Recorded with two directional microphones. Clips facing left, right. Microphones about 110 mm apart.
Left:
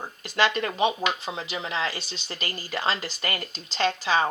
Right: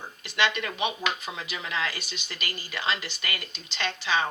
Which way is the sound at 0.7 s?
30° left (ahead or behind).